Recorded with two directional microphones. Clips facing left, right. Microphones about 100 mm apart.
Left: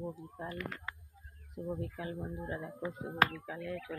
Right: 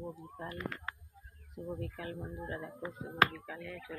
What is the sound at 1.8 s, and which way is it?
Speech, 15° left (ahead or behind).